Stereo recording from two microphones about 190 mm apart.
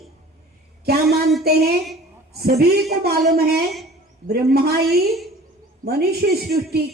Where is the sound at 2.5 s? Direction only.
55° right (ahead or behind).